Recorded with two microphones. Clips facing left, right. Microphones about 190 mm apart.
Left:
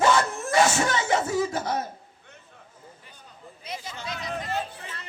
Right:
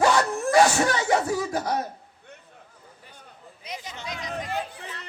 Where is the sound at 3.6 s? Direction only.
15° right (ahead or behind).